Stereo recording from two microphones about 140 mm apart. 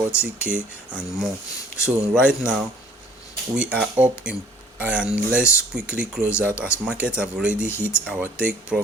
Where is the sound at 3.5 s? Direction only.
5° right (ahead or behind).